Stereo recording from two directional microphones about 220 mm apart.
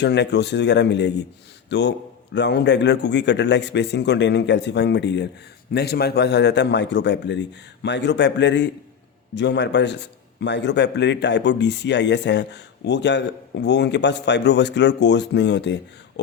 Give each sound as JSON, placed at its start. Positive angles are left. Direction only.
{"t": 0.0, "sound": "a man's voice", "side_deg": 50}